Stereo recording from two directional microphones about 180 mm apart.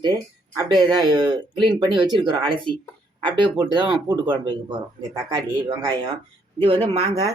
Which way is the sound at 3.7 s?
25° right (ahead or behind).